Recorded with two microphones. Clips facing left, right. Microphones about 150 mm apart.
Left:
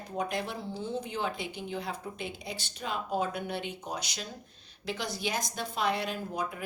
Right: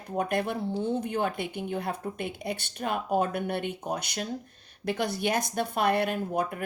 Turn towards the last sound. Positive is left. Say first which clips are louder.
# right 6 dB
turn(degrees=-55)  # may be behind; listen again after turning